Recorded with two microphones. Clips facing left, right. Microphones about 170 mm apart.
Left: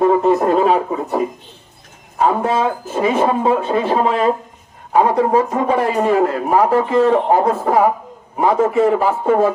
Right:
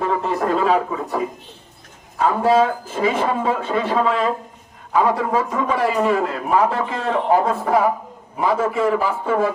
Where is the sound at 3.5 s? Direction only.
40° left (ahead or behind).